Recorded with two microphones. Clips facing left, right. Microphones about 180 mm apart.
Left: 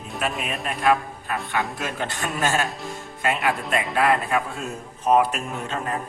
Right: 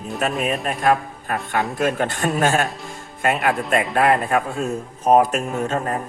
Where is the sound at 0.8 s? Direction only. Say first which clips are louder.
Even; 45° right (ahead or behind).